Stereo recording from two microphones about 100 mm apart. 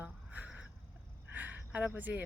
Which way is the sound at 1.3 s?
15° right (ahead or behind).